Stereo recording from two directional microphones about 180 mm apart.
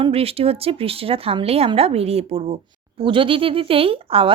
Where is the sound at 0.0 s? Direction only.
35° right (ahead or behind).